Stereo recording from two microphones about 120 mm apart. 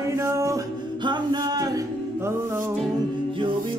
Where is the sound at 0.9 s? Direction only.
40° right (ahead or behind); by 2.7 s 20° right (ahead or behind).